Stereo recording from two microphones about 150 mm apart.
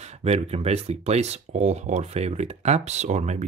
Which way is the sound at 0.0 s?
45° right (ahead or behind).